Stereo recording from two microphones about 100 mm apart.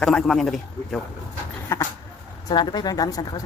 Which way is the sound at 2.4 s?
45° left (ahead or behind).